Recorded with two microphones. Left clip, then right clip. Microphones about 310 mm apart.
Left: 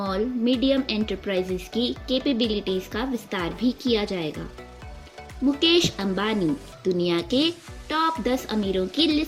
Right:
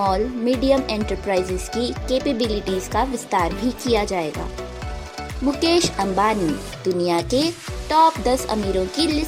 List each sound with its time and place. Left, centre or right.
0.1 s speech: centre
5.5 s speech: centre